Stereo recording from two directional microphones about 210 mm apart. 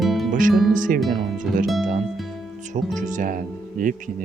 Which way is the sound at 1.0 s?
Centre (ahead or behind).